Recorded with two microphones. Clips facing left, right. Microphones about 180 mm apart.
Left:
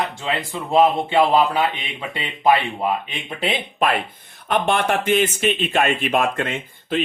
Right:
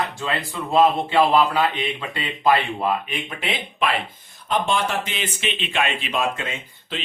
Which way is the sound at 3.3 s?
40° left (ahead or behind).